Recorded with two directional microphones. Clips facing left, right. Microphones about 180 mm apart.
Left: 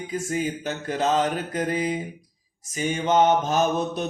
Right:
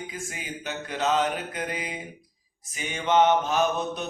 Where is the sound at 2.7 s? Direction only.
40° left (ahead or behind).